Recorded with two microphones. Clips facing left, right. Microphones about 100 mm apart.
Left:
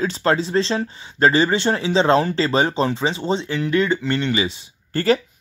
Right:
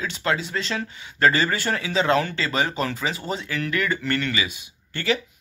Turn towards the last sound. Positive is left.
turn(degrees=40)  # may be behind; listen again after turning